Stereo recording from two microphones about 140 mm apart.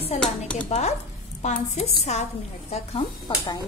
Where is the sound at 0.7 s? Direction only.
50° left (ahead or behind).